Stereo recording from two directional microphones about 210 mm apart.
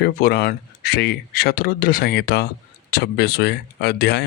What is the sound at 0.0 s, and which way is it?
Speech, 50° left (ahead or behind).